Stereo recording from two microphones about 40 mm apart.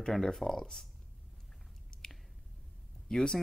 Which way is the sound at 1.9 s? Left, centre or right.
Centre.